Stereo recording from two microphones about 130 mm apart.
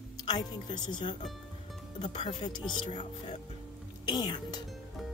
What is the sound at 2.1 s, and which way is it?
Speech, 35° left (ahead or behind).